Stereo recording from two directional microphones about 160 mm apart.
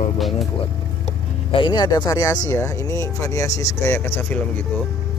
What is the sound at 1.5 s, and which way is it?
Speech, 30° left (ahead or behind).